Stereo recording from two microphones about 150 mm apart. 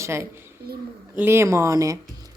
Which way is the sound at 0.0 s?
15° right (ahead or behind).